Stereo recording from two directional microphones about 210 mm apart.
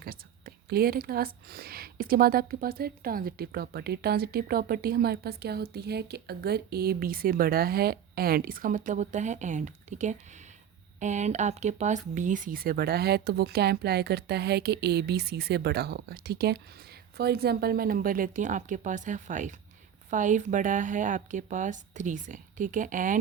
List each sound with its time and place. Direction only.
0.0 s speech: 45° right (ahead or behind)